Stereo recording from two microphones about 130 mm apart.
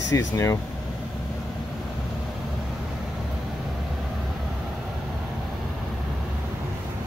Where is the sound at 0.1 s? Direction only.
25° left (ahead or behind).